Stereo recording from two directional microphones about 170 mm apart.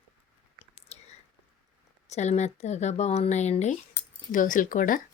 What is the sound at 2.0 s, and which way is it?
A woman's voice, 40° left (ahead or behind).